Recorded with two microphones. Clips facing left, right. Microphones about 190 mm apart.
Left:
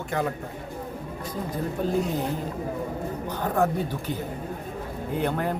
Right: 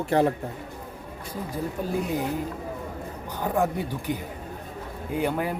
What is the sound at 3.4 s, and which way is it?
Speech, 15° right (ahead or behind).